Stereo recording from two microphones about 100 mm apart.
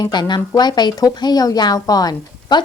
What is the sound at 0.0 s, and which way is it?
Speech, 45° left (ahead or behind).